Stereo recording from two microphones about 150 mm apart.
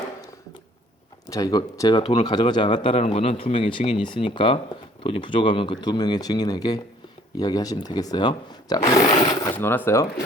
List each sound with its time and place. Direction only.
1.3 s speech: 25° left (ahead or behind)
3.0 s speech: 50° left (ahead or behind); by 9.5 s 25° left (ahead or behind)
9.5 s speech: 15° left (ahead or behind)